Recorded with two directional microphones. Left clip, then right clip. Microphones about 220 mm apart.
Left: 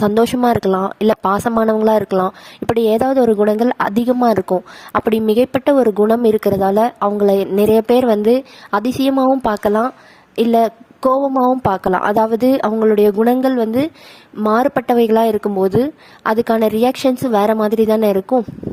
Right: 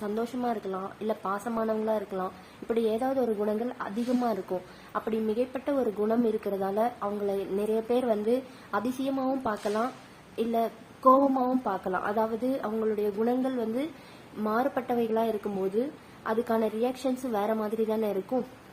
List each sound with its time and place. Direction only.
0.0 s speech: 50° left (ahead or behind)